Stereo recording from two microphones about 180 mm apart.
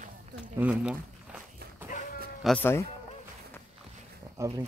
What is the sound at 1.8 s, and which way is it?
Sheep, 45° left (ahead or behind).